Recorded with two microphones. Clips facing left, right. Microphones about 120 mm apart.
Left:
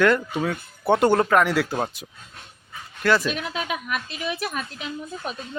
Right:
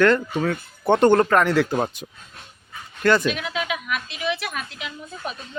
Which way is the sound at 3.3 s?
35° left (ahead or behind).